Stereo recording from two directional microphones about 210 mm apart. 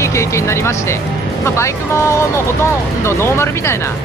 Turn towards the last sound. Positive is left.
turn(degrees=10)  # may be behind; listen again after turning